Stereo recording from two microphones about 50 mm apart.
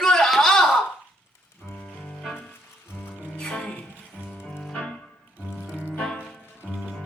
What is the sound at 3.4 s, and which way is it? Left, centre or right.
Music, centre.